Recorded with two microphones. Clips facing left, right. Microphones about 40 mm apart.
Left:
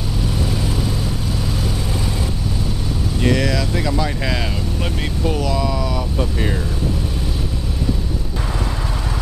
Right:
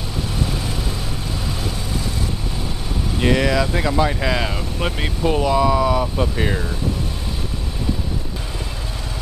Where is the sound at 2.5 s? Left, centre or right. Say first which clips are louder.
Left 2 dB; centre.